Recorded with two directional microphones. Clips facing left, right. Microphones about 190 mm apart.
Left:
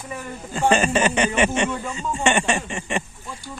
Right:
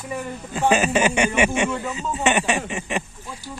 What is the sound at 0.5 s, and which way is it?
Speech, 5° right (ahead or behind).